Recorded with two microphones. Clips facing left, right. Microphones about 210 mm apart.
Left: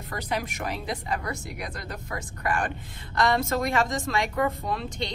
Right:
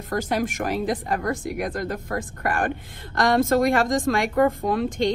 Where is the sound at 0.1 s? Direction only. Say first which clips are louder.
Right 7 dB; 45° right (ahead or behind).